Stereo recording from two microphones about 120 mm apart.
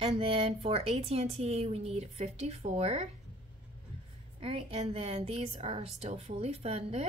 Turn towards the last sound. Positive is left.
turn(degrees=-60)  # may be behind; listen again after turning